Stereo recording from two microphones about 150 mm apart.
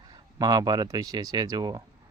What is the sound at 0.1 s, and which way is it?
Speech, 25° right (ahead or behind).